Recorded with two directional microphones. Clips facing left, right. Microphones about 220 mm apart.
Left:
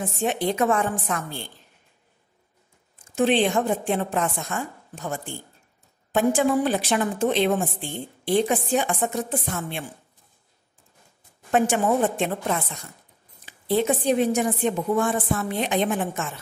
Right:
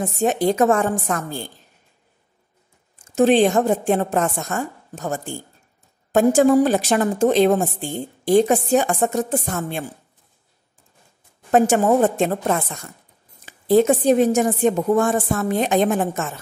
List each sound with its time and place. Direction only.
0.0 s a woman's voice: 40° right (ahead or behind)
3.2 s a woman's voice: 40° right (ahead or behind)
11.5 s a woman's voice: 40° right (ahead or behind)